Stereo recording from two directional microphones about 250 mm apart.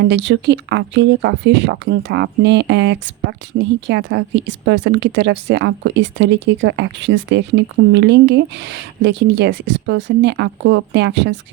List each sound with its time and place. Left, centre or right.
0.0 s speech: right